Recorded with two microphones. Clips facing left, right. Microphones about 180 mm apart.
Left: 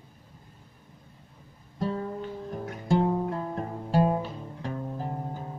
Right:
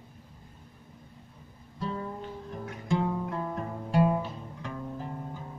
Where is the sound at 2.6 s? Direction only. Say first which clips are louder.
Left 4 dB; 35° left (ahead or behind).